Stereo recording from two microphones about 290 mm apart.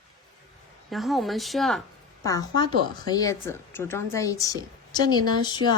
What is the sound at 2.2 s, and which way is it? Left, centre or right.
A woman's voice, centre.